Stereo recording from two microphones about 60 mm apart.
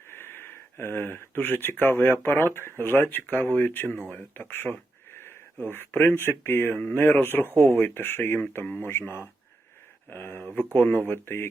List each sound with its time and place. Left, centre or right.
0.1 s speech: left
5.1 s a sound: left
6.1 s speech: left
6.7 s speech: left
7.9 s speech: left
11.1 s speech: left